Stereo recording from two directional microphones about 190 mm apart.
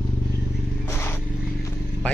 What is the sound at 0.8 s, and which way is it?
Vehicle, 15° left (ahead or behind).